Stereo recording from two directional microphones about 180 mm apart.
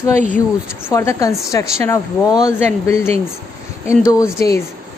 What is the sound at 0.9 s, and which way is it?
A woman's voice, 15° left (ahead or behind).